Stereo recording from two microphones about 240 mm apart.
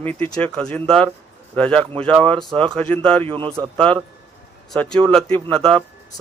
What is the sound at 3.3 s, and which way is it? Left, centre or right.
Speech, right.